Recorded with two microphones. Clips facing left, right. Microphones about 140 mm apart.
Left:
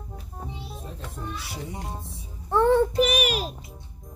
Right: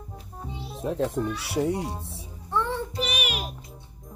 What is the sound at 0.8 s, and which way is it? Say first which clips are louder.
Speech: right 14 dB; 80° right.